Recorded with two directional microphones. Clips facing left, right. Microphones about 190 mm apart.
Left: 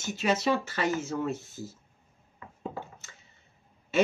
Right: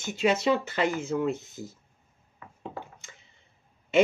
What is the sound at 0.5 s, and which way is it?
Speech, 15° right (ahead or behind).